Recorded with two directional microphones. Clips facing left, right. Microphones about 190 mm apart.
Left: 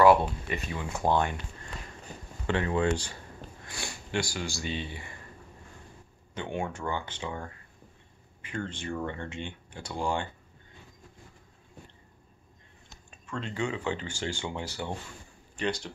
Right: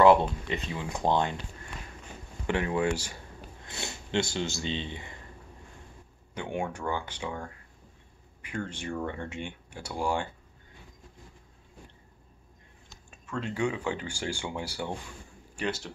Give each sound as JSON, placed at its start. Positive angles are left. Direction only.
{"t": 0.5, "sound": "speech", "side_deg": -20}
{"t": 2.4, "sound": "speech", "side_deg": -15}
{"t": 3.6, "sound": "speech", "side_deg": -20}
{"t": 6.3, "sound": "speech", "side_deg": -10}
{"t": 13.3, "sound": "speech", "side_deg": -10}